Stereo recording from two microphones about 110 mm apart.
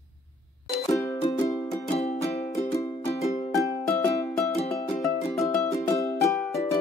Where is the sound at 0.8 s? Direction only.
30° left (ahead or behind).